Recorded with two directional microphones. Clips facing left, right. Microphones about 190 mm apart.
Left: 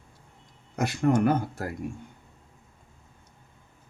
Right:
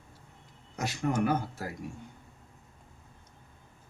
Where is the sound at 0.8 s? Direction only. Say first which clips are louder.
Left 6 dB; 55° left (ahead or behind).